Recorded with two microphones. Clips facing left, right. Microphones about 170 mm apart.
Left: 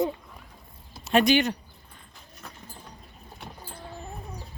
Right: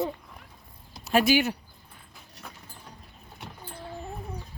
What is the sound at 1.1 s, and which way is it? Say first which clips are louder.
Speech: left 1 dB; 5° right (ahead or behind).